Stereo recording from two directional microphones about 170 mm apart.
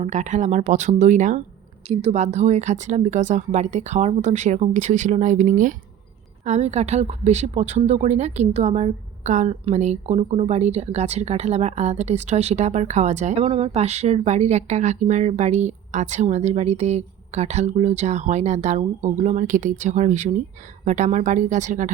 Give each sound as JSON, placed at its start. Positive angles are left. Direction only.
{"t": 0.0, "sound": "a woman's voice", "side_deg": -45}